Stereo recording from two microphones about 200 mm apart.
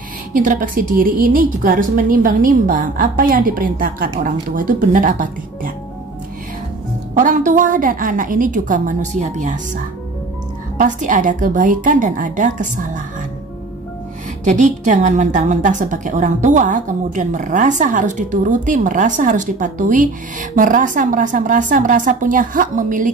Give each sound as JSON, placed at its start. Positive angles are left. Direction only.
{"t": 0.3, "sound": "a woman's voice", "side_deg": -40}
{"t": 7.2, "sound": "a woman's voice", "side_deg": -40}
{"t": 14.4, "sound": "a woman's voice", "side_deg": -40}